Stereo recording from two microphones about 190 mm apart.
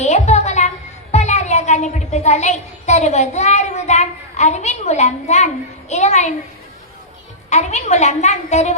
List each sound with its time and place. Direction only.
0.0 s a sound: 35° left (ahead or behind)
1.1 s a child's voice: 35° left (ahead or behind)
7.5 s a child's voice: 35° left (ahead or behind)